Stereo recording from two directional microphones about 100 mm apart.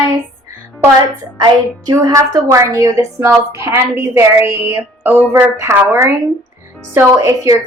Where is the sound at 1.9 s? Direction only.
35° right (ahead or behind).